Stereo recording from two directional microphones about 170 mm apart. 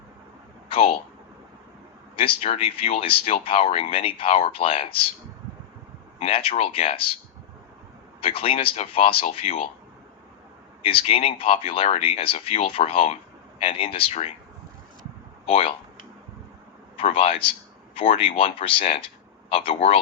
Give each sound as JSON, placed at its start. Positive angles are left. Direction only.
{"t": 0.7, "sound": "speech", "side_deg": 35}
{"t": 2.1, "sound": "speech", "side_deg": 30}
{"t": 6.1, "sound": "speech", "side_deg": 35}
{"t": 8.2, "sound": "speech", "side_deg": 35}
{"t": 10.8, "sound": "speech", "side_deg": 35}
{"t": 15.4, "sound": "speech", "side_deg": 35}
{"t": 17.0, "sound": "speech", "side_deg": 35}